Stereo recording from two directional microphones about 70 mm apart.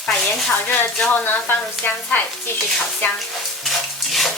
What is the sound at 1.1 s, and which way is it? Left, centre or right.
Speech, left.